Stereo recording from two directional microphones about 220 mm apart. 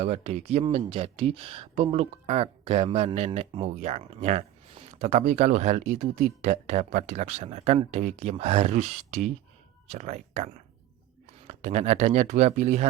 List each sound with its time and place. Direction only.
0.0 s speech: 30° right (ahead or behind)